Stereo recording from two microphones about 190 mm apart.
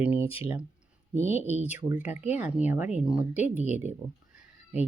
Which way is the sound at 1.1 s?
10° right (ahead or behind).